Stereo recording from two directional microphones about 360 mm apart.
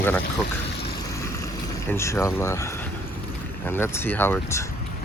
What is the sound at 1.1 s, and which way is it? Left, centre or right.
Vehicle, centre.